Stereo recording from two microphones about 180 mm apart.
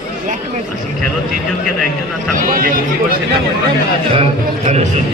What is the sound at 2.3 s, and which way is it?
Speech, 50° right (ahead or behind).